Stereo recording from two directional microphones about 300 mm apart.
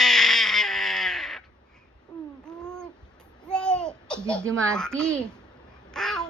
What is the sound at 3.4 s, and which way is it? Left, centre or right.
Babbling, centre.